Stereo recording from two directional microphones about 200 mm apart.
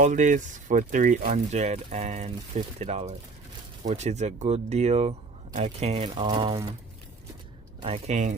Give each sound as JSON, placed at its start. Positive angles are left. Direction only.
{"t": 0.0, "sound": "speech", "side_deg": -40}
{"t": 7.8, "sound": "speech", "side_deg": -30}